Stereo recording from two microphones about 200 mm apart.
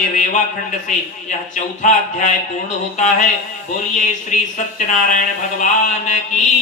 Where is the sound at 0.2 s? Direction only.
40° left (ahead or behind).